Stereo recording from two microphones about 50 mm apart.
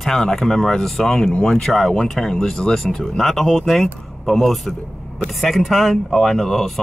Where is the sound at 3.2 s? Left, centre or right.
Centre.